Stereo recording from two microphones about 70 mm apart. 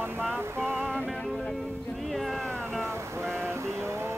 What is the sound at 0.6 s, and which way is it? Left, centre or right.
Music, centre.